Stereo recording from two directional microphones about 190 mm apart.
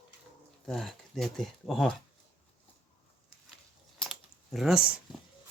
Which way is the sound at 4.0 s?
Centre (ahead or behind).